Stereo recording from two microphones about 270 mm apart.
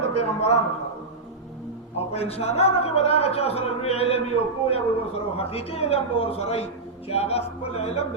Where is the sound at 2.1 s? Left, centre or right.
Left.